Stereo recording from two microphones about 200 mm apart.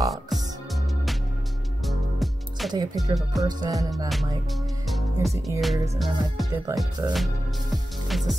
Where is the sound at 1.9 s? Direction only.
Centre (ahead or behind).